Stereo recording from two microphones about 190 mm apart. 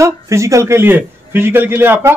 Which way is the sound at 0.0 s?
15° right (ahead or behind).